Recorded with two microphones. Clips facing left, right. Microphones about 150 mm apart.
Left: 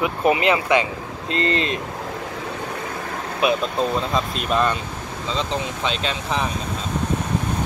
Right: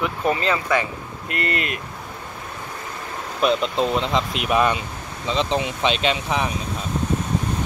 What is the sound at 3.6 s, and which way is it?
Speech, 20° right (ahead or behind).